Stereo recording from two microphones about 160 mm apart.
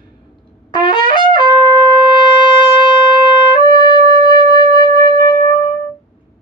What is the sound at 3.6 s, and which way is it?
Music, 30° left (ahead or behind).